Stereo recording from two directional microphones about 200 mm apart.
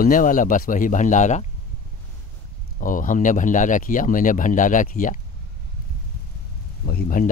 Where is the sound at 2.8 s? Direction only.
40° left (ahead or behind).